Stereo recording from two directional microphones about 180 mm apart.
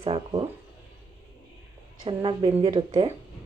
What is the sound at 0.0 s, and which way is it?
Speech, 25° right (ahead or behind).